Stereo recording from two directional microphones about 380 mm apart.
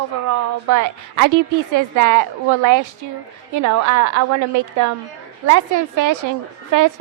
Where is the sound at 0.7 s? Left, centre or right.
Right.